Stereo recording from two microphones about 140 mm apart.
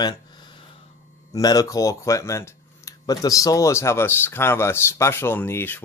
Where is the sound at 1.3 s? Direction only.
25° left (ahead or behind).